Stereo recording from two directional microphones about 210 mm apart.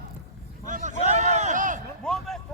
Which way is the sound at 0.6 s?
35° right (ahead or behind).